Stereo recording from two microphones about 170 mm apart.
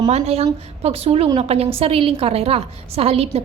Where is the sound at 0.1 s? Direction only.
40° right (ahead or behind).